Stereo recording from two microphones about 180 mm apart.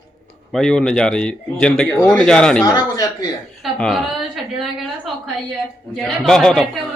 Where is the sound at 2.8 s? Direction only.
20° left (ahead or behind).